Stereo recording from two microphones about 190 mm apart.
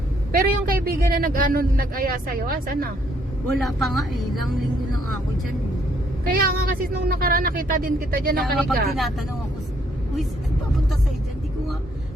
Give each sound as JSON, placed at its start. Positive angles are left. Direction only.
{"t": 0.3, "sound": "a man's voice", "side_deg": -50}
{"t": 3.7, "sound": "a woman's voice", "side_deg": 0}
{"t": 6.2, "sound": "a man's voice", "side_deg": -50}